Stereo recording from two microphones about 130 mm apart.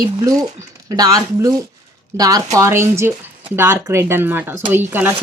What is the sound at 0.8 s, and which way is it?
Speech, 30° right (ahead or behind).